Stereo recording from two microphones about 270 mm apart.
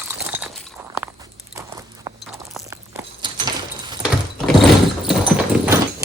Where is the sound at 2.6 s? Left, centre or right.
Centre.